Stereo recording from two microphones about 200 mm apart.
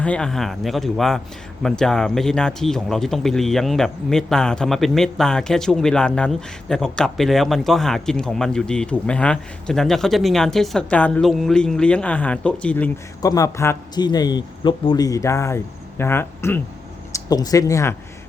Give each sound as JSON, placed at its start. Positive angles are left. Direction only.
{"t": 0.0, "sound": "speech", "side_deg": 5}
{"t": 13.2, "sound": "speech", "side_deg": 15}